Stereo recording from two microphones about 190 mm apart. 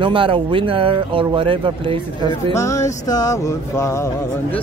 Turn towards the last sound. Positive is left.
turn(degrees=15)  # may be behind; listen again after turning